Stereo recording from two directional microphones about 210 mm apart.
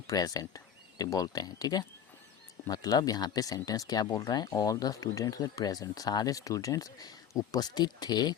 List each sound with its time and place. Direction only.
0.1 s speech: 15° left (ahead or behind)